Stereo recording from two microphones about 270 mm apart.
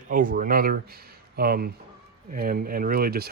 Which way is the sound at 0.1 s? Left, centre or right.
Right.